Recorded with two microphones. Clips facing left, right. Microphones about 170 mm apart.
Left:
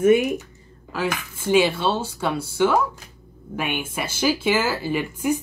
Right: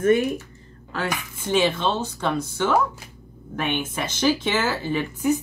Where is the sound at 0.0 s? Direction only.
10° left (ahead or behind).